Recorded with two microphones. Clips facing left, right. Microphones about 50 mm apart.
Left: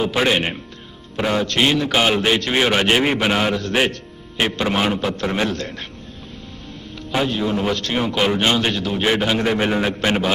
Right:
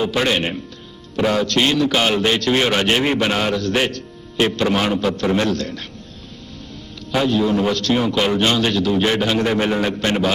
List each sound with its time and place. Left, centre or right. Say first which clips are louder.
0.2 s a man's voice: left 1 dB; centre
7.1 s a man's voice: right 3 dB; centre